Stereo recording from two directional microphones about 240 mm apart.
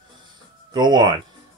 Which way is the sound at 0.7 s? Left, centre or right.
Centre.